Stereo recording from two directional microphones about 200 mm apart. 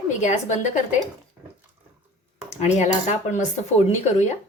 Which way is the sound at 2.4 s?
35° left (ahead or behind).